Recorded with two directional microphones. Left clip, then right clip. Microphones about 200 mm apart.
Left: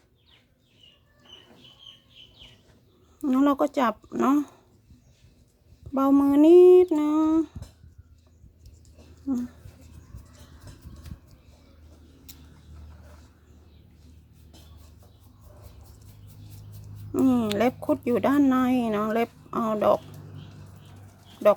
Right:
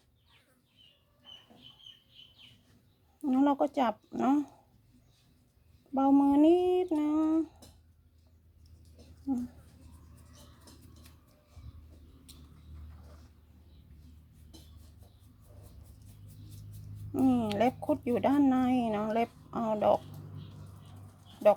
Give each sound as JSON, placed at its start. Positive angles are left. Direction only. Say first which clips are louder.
{"t": 3.2, "sound": "speech", "louder": "left 5 dB", "side_deg": 25}
{"t": 5.9, "sound": "speech", "louder": "left 4 dB", "side_deg": 25}
{"t": 9.3, "sound": "speech", "louder": "left 5 dB", "side_deg": 25}
{"t": 17.1, "sound": "speech", "louder": "left 5 dB", "side_deg": 25}